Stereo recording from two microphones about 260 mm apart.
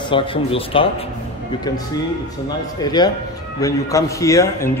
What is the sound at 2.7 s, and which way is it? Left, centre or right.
A man's voice, centre.